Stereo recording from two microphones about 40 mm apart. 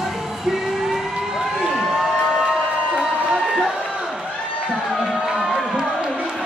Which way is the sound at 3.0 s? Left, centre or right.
Centre.